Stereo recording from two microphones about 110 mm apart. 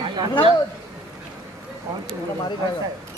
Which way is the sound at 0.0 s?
40° right (ahead or behind).